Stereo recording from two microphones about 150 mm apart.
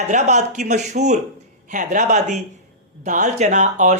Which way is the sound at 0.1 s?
50° right (ahead or behind).